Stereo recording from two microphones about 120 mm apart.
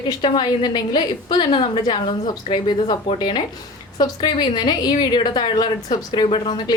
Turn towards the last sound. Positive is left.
turn(degrees=40)  # may be behind; listen again after turning